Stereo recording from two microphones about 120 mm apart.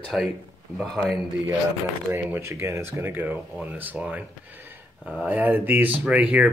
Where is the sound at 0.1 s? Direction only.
5° right (ahead or behind).